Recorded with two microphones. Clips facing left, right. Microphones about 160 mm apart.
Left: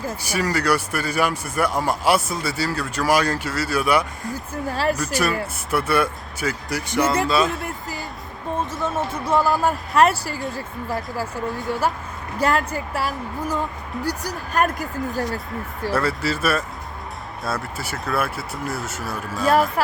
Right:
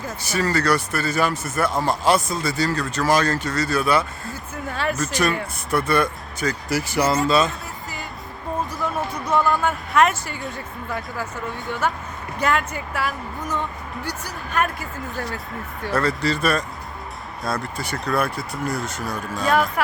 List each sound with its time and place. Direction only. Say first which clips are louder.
0.2 s speech: right 3 dB; 10° left (ahead or behind)
4.5 s speech: left 3 dB; 35° left (ahead or behind)
4.9 s speech: even; 10° left (ahead or behind)
6.7 s speech: right 1 dB; 5° right (ahead or behind)
8.7 s basketball bounce: left 1 dB; 25° left (ahead or behind)
9.3 s speech: left 1 dB; 5° left (ahead or behind)
9.6 s speech: left 1 dB; 35° left (ahead or behind)
15.9 s speech: right 1 dB; 5° left (ahead or behind)
19.5 s speech: left 2 dB; 35° left (ahead or behind)